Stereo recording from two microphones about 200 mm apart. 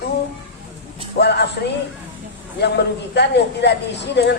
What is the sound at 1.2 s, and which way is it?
Speech, 55° left (ahead or behind).